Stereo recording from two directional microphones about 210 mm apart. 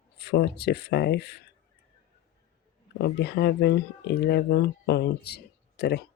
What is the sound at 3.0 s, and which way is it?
Speech, 50° left (ahead or behind).